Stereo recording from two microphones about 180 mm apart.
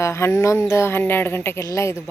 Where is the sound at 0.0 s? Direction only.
15° left (ahead or behind).